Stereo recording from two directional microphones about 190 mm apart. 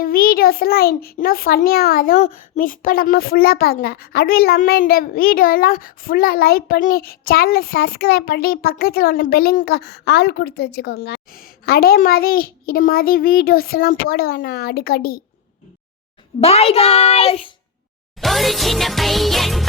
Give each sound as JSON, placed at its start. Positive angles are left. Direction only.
{"t": 0.0, "sound": "a child's voice", "side_deg": 50}
{"t": 16.4, "sound": "a child's voice", "side_deg": 30}
{"t": 18.2, "sound": "music", "side_deg": 0}